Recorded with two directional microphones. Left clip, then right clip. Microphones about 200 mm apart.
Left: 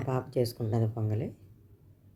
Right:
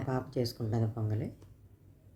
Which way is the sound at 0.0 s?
15° left (ahead or behind).